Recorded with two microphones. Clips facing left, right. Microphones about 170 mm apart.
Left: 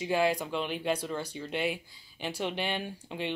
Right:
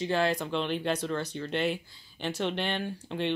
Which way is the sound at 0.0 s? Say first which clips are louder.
Even; 10° left (ahead or behind).